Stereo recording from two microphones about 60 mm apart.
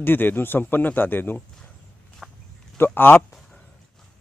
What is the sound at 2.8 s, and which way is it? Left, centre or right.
Speech, left.